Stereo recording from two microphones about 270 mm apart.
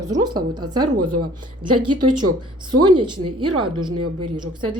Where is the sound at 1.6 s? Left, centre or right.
Right.